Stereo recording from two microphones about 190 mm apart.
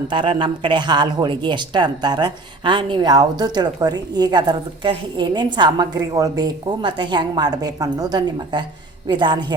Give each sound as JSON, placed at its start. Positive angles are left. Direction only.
{"t": 0.1, "sound": "speech", "side_deg": -25}